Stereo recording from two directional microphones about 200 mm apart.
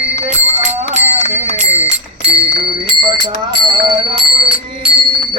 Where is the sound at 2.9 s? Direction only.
20° right (ahead or behind).